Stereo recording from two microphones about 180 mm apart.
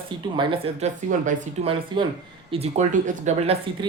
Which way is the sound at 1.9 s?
25° right (ahead or behind).